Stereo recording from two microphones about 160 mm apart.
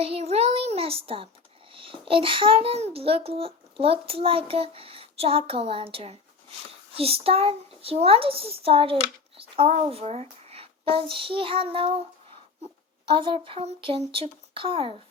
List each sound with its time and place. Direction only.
0.0 s a sound: 40° right (ahead or behind)
1.7 s a child's voice: 35° right (ahead or behind)
13.1 s a child's voice: 35° right (ahead or behind)